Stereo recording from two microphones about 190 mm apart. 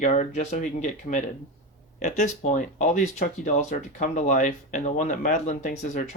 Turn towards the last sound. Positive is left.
turn(degrees=40)  # may be behind; listen again after turning